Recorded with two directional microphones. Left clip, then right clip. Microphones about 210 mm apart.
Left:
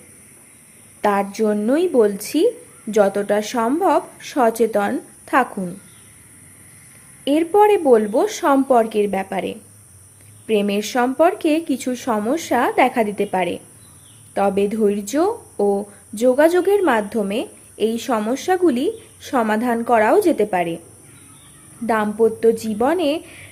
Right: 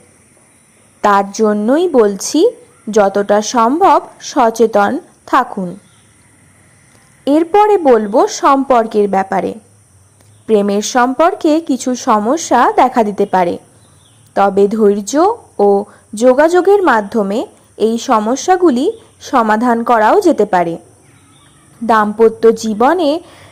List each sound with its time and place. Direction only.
1.0 s a woman's voice: 15° right (ahead or behind)
7.3 s a woman's voice: 20° right (ahead or behind)
21.9 s speech: 10° right (ahead or behind)
22.4 s a woman's voice: 20° right (ahead or behind)